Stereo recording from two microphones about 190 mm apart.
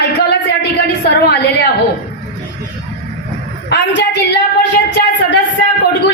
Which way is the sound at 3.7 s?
65° left (ahead or behind).